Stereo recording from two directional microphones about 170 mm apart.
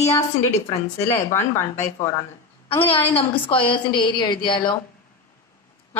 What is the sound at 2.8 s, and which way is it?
A woman's voice, 30° left (ahead or behind).